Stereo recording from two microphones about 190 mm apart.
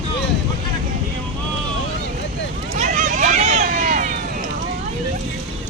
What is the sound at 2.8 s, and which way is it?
Run, 40° right (ahead or behind).